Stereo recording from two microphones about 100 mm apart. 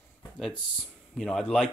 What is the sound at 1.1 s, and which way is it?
Speech, 5° left (ahead or behind).